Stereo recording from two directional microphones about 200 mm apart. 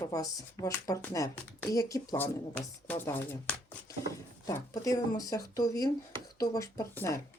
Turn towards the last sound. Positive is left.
turn(degrees=15)  # may be behind; listen again after turning